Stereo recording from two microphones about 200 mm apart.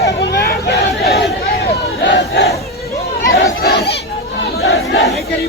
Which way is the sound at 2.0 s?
60° left (ahead or behind).